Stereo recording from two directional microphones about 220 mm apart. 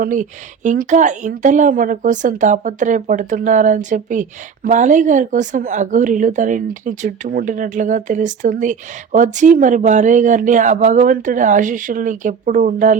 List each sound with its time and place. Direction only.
0.0 s a woman's voice: 35° right (ahead or behind)